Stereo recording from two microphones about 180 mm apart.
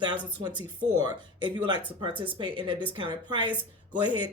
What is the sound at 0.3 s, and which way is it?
Speech, 25° right (ahead or behind).